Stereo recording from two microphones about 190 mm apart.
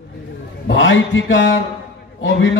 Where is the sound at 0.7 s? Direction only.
80° left.